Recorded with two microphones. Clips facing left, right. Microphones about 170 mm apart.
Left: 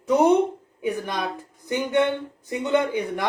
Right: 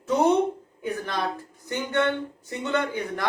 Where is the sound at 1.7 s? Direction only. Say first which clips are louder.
Left 3 dB; 15° left (ahead or behind).